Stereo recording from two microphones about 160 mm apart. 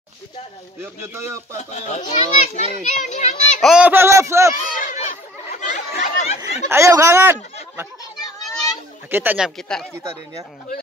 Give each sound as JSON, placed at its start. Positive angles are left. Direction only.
{"t": 0.7, "sound": "a man's voice", "side_deg": -15}
{"t": 1.6, "sound": "a child's voice", "side_deg": 50}
{"t": 3.6, "sound": "a man's voice", "side_deg": -5}
{"t": 4.6, "sound": "chatter", "side_deg": 55}
{"t": 6.7, "sound": "a man's voice", "side_deg": -20}
{"t": 9.1, "sound": "a man's voice", "side_deg": -10}
{"t": 9.6, "sound": "speech", "side_deg": 5}